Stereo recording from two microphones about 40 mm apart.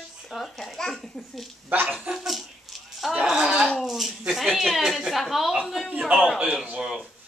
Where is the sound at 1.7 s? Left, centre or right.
Right.